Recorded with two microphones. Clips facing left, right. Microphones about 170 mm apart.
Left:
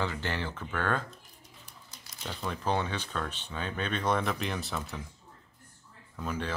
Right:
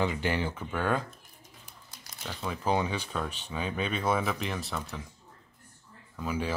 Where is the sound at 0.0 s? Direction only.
15° right (ahead or behind).